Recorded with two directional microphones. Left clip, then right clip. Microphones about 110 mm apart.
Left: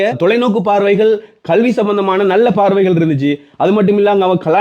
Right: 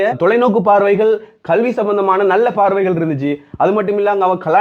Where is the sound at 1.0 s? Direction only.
25° left (ahead or behind).